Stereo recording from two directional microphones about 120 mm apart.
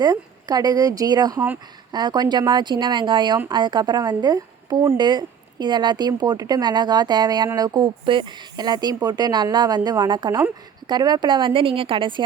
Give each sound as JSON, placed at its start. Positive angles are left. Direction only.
{"t": 0.0, "sound": "speech", "side_deg": -35}